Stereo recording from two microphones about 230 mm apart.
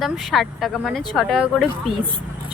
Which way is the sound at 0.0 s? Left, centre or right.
Centre.